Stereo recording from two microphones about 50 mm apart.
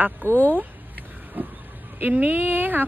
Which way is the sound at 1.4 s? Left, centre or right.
Right.